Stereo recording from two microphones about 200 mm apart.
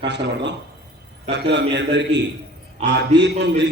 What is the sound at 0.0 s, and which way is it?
A man's voice, 60° right (ahead or behind).